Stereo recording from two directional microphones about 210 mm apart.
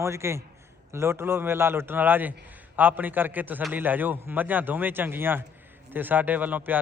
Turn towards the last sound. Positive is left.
turn(degrees=-10)  # may be behind; listen again after turning